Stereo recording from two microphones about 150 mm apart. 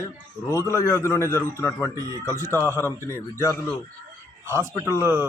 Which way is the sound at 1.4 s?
15° left (ahead or behind).